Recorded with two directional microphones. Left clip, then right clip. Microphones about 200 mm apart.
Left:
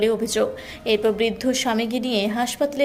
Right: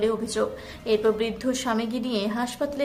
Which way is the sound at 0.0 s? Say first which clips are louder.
Left 4 dB; 10° left (ahead or behind).